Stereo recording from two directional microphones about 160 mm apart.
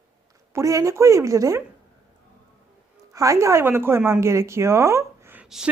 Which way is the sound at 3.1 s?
20° right (ahead or behind).